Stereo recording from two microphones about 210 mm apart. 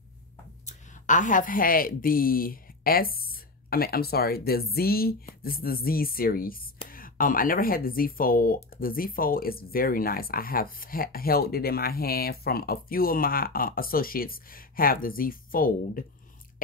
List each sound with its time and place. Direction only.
0.7 s speech: 35° left (ahead or behind)